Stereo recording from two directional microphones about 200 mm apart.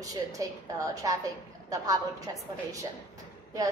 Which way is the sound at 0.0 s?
20° right (ahead or behind).